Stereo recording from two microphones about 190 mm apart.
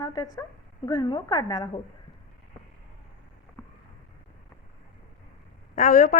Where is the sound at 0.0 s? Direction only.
20° left (ahead or behind).